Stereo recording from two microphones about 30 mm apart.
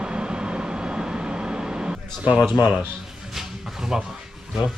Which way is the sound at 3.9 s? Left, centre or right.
Centre.